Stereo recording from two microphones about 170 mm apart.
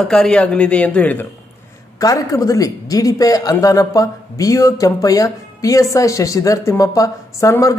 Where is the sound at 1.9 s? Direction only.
20° left (ahead or behind).